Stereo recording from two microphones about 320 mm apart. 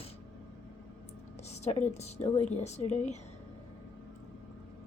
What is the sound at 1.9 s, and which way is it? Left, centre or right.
Speech, left.